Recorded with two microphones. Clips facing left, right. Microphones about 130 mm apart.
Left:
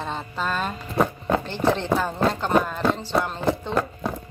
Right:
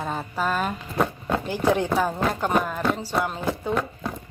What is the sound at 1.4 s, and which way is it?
Speech, 10° right (ahead or behind).